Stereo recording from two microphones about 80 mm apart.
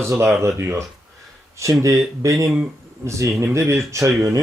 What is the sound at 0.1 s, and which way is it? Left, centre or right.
A man's voice, right.